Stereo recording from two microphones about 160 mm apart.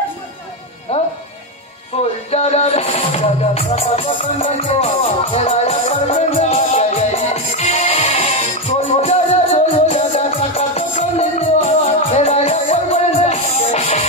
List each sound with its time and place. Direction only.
0.9 s music: 40° left (ahead or behind)